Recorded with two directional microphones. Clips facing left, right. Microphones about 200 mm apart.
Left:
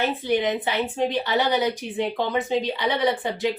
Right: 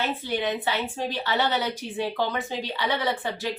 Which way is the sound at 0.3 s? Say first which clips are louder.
Left 5 dB; 15° left (ahead or behind).